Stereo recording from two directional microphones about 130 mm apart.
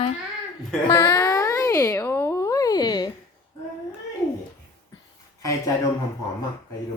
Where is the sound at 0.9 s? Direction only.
25° left (ahead or behind).